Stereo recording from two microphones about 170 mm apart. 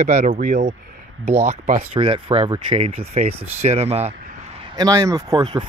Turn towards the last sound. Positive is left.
turn(degrees=-25)  # may be behind; listen again after turning